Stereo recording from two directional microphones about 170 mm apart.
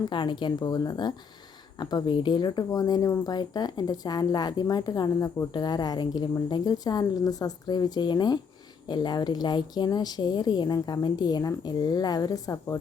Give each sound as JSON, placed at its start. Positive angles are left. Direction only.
{"t": 0.1, "sound": "speech", "side_deg": 25}